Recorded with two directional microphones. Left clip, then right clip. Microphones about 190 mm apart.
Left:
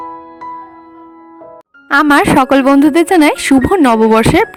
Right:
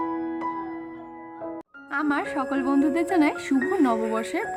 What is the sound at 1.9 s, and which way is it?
A woman's voice, 65° left (ahead or behind).